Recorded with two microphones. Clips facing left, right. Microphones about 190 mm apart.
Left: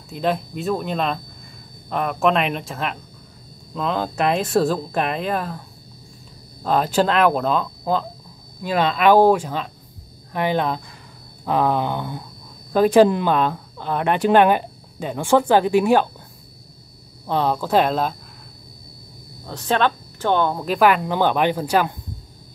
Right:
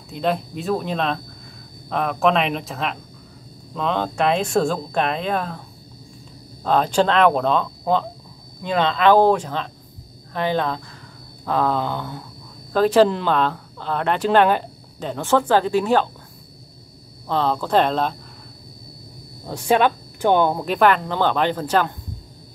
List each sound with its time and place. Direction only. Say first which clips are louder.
0.1 s speech: even; centre (ahead or behind)
6.6 s speech: right 1 dB; 5° left (ahead or behind)
17.3 s speech: even; 15° left (ahead or behind)
19.4 s speech: right 3 dB; 10° right (ahead or behind)
20.6 s speech: even; 5° left (ahead or behind)